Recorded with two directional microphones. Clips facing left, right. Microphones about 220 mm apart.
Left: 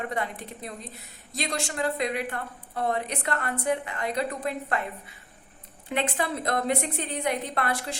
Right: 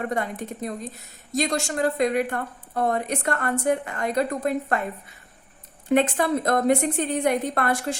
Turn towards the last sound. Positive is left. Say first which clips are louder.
# right 5 dB
turn(degrees=-45)  # may be behind; listen again after turning